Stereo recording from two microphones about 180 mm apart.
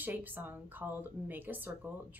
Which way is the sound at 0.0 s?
10° right (ahead or behind).